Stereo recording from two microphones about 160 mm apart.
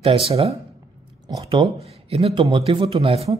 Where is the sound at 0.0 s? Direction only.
35° right (ahead or behind).